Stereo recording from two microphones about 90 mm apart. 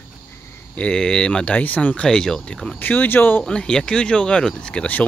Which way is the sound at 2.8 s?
20° left (ahead or behind).